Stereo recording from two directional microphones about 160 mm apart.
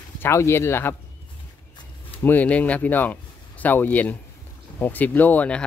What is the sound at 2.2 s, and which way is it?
Speech, 10° left (ahead or behind).